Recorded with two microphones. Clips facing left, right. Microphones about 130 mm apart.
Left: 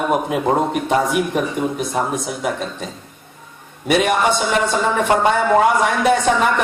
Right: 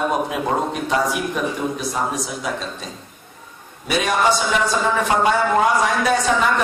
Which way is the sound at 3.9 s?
65° left (ahead or behind).